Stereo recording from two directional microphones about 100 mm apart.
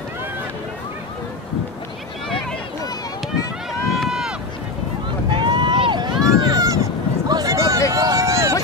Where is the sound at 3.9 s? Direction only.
5° right (ahead or behind).